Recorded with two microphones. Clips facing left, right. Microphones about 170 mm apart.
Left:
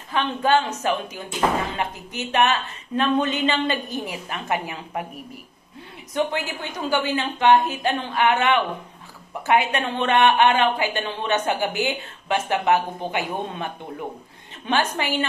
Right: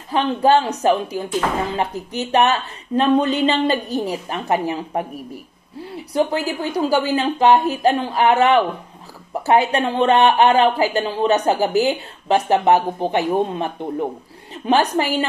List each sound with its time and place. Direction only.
0.1 s speech: 35° right (ahead or behind)